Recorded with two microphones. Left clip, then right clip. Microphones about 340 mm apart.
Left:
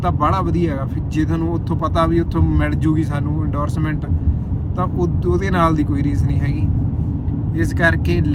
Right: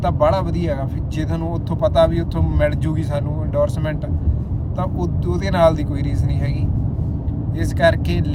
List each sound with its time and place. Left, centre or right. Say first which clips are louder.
0.0 s speech: right 1 dB; centre
7.5 s speech: right 1 dB; centre